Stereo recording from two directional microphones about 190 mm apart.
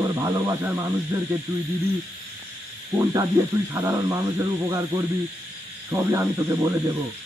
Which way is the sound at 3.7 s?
15° right (ahead or behind).